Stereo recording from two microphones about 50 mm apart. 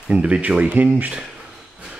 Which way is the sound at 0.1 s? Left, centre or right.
Right.